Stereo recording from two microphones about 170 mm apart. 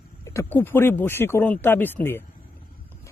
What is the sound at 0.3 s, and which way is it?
Speech, 15° left (ahead or behind).